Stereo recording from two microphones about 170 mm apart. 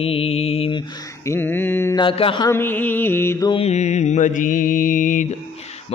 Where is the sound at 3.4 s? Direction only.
35° left (ahead or behind).